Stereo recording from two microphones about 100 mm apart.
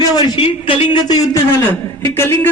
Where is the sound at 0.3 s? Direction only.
65° left (ahead or behind).